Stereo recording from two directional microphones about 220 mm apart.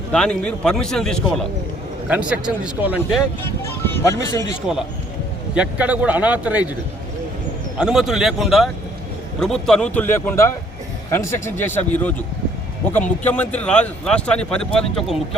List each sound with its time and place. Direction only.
0.1 s speech: 5° left (ahead or behind)
3.6 s speech: 10° left (ahead or behind)
5.5 s speech: 5° right (ahead or behind)
7.8 s speech: 5° right (ahead or behind)